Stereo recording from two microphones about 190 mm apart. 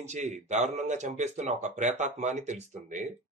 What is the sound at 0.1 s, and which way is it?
Speech, 40° right (ahead or behind).